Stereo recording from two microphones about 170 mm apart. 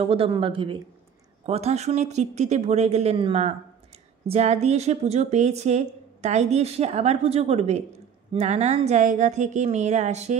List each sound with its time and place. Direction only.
0.0 s a woman's voice: 35° right (ahead or behind)